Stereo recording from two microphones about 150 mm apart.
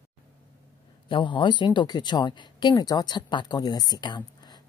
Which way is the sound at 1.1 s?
30° left (ahead or behind).